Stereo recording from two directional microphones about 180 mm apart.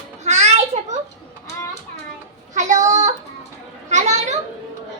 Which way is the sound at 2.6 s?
40° right (ahead or behind).